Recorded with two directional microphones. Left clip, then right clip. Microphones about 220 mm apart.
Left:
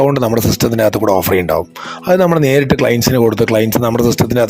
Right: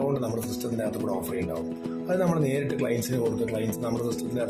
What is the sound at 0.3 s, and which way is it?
Speech, 40° left (ahead or behind).